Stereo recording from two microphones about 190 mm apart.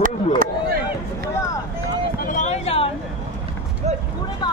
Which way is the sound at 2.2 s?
40° left (ahead or behind).